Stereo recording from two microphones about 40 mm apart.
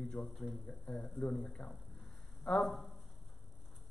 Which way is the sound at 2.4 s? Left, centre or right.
Centre.